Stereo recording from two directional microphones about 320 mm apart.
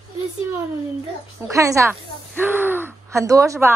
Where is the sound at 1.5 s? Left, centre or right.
Centre.